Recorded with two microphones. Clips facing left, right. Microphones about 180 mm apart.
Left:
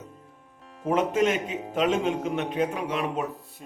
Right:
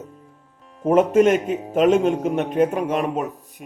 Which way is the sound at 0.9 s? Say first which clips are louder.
Right 8 dB; 50° right (ahead or behind).